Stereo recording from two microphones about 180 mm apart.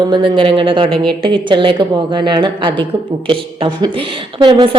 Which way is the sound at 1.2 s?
25° right (ahead or behind).